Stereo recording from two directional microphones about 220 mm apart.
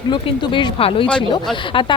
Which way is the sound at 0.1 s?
20° left (ahead or behind).